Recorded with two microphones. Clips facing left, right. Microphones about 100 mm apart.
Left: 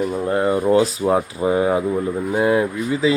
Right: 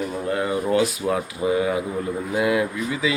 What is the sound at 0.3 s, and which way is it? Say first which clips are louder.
Speech: left 5 dB; 35° left (ahead or behind).